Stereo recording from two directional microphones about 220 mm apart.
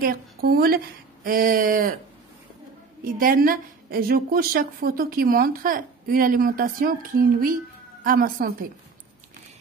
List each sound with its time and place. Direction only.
0.0 s a woman's voice: 40° right (ahead or behind)
3.0 s a woman's voice: 40° right (ahead or behind)
8.0 s a woman's voice: 40° right (ahead or behind)